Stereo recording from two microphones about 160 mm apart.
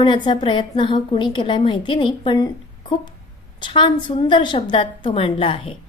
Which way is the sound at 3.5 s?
30° left (ahead or behind).